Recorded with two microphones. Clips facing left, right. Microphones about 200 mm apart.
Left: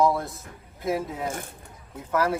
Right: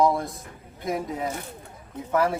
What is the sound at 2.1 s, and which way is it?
Speech, centre (ahead or behind).